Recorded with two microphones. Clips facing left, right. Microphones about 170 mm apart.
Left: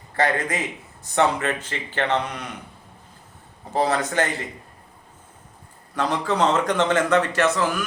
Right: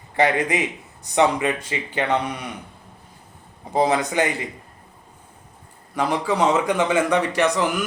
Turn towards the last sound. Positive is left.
turn(degrees=-15)  # may be behind; listen again after turning